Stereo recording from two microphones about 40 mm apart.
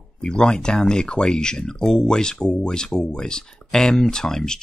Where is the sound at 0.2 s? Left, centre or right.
Left.